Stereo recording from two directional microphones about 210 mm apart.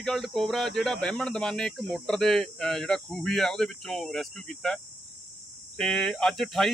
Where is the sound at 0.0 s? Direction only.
Centre (ahead or behind).